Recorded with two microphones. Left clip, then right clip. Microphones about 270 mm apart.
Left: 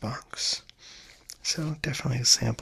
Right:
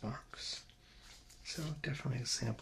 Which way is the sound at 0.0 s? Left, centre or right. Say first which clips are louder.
Left 13 dB; left.